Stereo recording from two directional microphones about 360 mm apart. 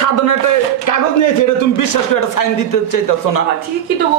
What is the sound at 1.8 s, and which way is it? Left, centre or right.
A man's voice, left.